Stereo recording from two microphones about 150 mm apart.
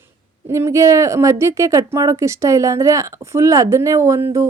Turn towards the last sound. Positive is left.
turn(degrees=-20)  # may be behind; listen again after turning